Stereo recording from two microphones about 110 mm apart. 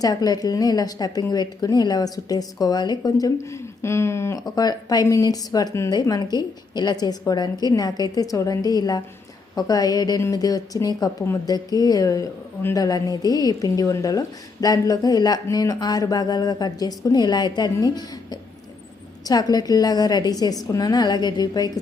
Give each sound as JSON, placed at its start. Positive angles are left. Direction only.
{"t": 0.0, "sound": "a woman's voice", "side_deg": 35}